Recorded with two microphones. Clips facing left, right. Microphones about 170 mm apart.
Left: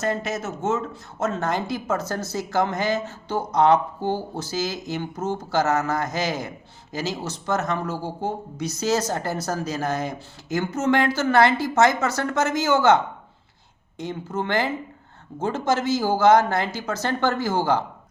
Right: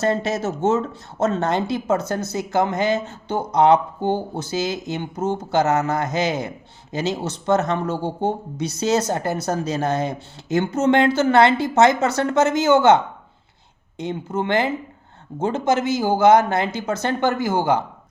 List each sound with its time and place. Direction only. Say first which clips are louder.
0.0 s speech: right 5 dB; 30° right (ahead or behind)
14.0 s speech: right 3 dB; 20° right (ahead or behind)